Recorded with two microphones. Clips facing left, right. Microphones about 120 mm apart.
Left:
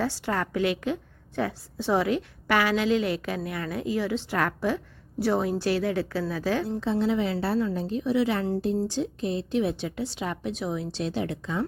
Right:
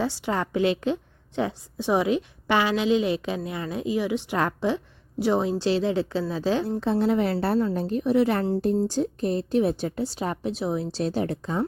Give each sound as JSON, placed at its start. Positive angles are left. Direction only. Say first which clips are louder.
{"t": 0.0, "sound": "a woman's voice", "louder": "right 1 dB", "side_deg": -15}
{"t": 6.7, "sound": "a woman's voice", "louder": "right 2 dB", "side_deg": -50}